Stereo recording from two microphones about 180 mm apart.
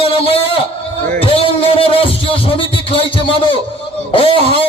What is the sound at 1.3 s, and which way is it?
Music, 30° left (ahead or behind).